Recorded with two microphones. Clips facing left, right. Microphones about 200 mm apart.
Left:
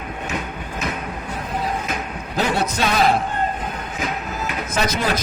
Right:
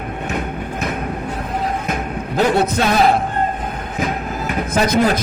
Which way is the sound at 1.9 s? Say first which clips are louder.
Right 5 dB; 55° right (ahead or behind).